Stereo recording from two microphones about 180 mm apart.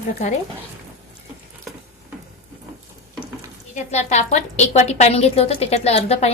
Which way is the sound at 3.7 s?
40° left (ahead or behind).